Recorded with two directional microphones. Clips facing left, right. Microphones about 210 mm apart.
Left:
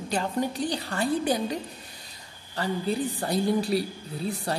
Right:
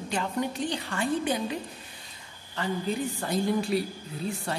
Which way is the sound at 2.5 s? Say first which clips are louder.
Left 2 dB; 35° left (ahead or behind).